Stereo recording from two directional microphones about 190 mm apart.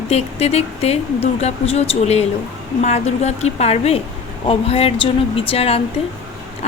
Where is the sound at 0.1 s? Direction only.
35° left (ahead or behind).